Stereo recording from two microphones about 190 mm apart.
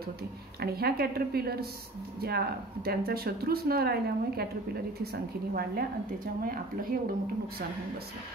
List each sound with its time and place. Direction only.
0.6 s a woman's voice: 55° right (ahead or behind)